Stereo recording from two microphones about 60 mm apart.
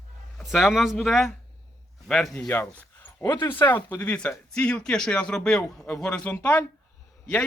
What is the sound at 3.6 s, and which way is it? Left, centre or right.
A man's voice, left.